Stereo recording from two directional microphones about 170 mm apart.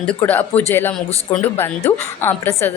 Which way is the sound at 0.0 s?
10° left (ahead or behind).